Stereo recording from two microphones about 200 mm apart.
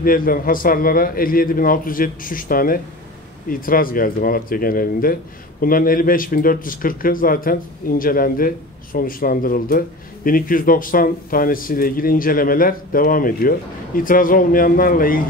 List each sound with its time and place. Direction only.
0.0 s a man's voice: 45° left (ahead or behind)